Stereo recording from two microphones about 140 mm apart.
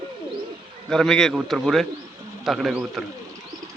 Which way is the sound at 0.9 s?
5° left (ahead or behind).